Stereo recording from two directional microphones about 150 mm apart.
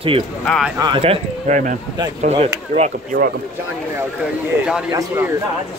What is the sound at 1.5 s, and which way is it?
Speech, 60° right (ahead or behind).